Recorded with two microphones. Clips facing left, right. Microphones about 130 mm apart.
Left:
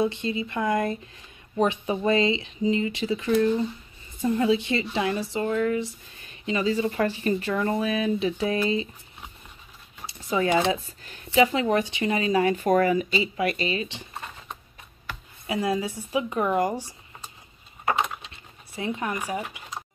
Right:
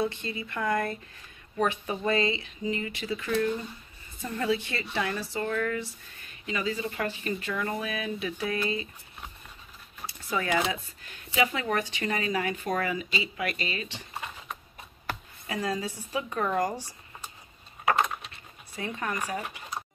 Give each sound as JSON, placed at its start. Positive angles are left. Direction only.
{"t": 0.0, "sound": "speech", "side_deg": 20}
{"t": 10.0, "sound": "speech", "side_deg": 25}
{"t": 12.6, "sound": "speech", "side_deg": 45}
{"t": 15.4, "sound": "speech", "side_deg": 15}
{"t": 17.8, "sound": "a sound", "side_deg": 0}
{"t": 18.8, "sound": "speech", "side_deg": 15}